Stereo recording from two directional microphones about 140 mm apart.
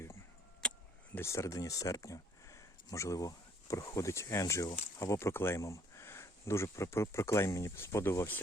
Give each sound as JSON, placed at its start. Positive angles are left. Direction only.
{"t": 0.6, "sound": "vehicle", "side_deg": 5}
{"t": 1.1, "sound": "speech", "side_deg": 20}